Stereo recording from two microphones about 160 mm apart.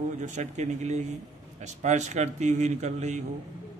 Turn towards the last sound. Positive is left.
turn(degrees=-45)  # may be behind; listen again after turning